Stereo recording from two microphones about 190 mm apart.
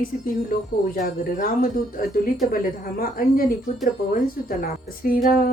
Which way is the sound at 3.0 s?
50° left (ahead or behind).